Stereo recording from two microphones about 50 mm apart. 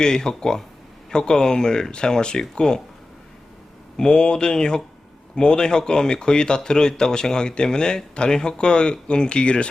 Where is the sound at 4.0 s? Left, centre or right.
Centre.